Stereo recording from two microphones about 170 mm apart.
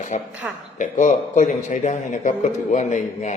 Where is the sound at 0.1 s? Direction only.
45° left (ahead or behind).